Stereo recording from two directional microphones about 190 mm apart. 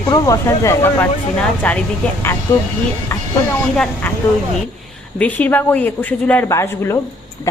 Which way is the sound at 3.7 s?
5° left (ahead or behind).